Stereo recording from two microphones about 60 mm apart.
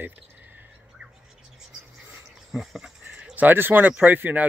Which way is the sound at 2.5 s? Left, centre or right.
Centre.